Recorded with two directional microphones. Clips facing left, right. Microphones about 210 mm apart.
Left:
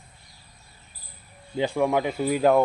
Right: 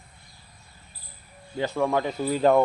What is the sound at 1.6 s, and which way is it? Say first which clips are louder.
Speech: left 2 dB; 15° left (ahead or behind).